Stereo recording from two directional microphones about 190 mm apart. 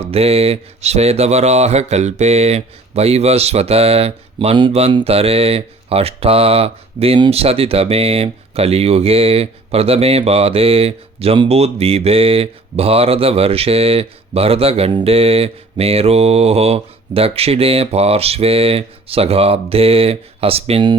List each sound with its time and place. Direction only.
0.0 s speech: 30° right (ahead or behind)